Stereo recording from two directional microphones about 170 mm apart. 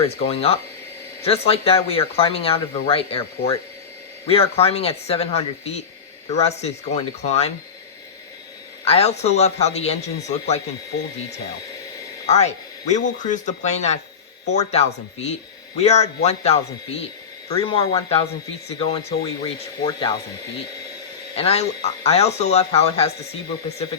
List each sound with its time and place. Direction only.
0.3 s speech: 35° left (ahead or behind)
4.3 s speech: 35° left (ahead or behind)
8.8 s speech: 35° left (ahead or behind)
12.3 s speech: 40° left (ahead or behind); by 20.1 s 25° left (ahead or behind)
21.3 s speech: 35° left (ahead or behind)